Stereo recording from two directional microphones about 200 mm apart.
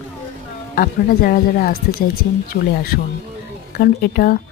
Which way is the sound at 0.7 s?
45° left (ahead or behind).